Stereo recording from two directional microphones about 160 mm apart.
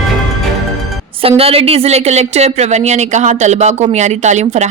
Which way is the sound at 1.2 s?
35° right (ahead or behind).